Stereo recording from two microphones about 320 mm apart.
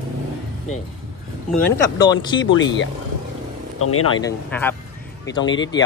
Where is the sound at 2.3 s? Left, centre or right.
Left.